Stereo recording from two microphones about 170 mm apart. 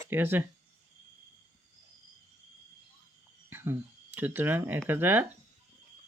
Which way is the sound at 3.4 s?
15° right (ahead or behind).